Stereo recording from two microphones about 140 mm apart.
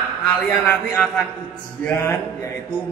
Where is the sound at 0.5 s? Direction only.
10° left (ahead or behind).